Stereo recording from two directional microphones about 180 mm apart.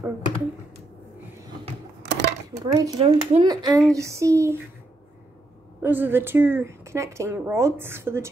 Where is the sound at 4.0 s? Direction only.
15° right (ahead or behind).